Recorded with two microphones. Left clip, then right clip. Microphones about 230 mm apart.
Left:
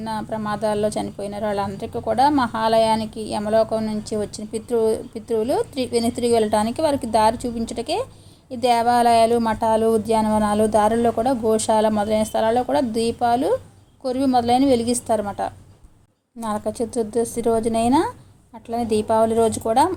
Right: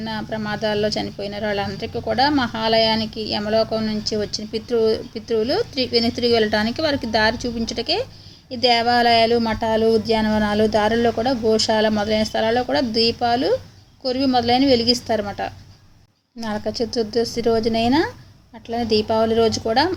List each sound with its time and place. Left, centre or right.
0.0 s speech: centre
18.9 s speech: centre